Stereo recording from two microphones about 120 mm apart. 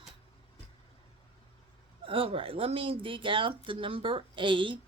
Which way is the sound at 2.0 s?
50° right (ahead or behind).